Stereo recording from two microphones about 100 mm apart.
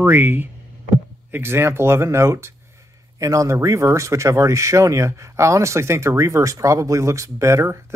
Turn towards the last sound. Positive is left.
turn(degrees=-30)  # may be behind; listen again after turning